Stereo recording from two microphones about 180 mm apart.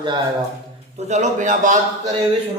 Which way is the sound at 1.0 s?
40° right (ahead or behind).